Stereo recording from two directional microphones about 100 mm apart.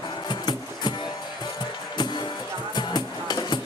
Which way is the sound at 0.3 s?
45° left (ahead or behind).